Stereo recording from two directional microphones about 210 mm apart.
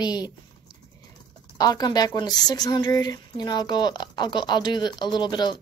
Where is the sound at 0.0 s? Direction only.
20° left (ahead or behind).